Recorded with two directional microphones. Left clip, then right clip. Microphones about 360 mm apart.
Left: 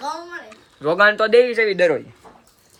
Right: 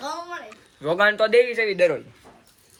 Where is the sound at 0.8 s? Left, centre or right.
Left.